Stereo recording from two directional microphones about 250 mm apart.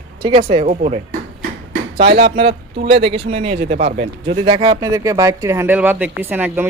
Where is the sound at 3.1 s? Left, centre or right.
Right.